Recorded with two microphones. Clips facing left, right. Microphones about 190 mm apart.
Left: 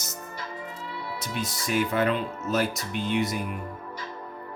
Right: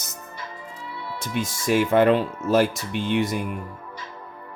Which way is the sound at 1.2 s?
50° right (ahead or behind).